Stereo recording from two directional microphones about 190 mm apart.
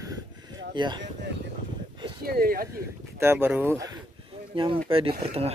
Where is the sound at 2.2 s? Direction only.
50° right (ahead or behind).